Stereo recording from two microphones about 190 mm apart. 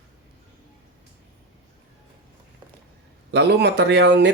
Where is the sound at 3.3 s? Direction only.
60° right (ahead or behind).